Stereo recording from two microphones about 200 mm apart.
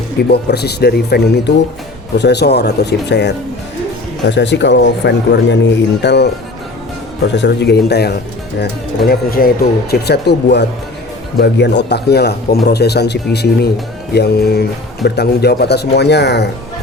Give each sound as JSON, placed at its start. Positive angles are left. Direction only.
{"t": 0.3, "sound": "speech", "side_deg": 55}
{"t": 7.3, "sound": "speech", "side_deg": 60}